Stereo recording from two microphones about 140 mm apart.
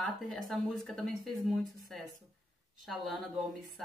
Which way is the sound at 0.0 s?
5° left (ahead or behind).